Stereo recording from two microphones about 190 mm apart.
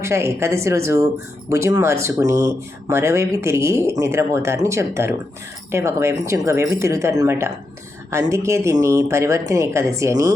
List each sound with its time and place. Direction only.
0.0 s speech: 15° right (ahead or behind)